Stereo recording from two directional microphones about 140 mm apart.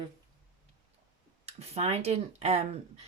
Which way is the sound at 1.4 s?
50° right (ahead or behind).